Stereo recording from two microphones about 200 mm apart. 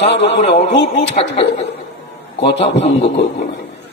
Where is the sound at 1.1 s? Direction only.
30° left (ahead or behind).